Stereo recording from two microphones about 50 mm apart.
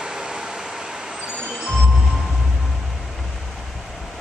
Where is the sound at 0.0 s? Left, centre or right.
Centre.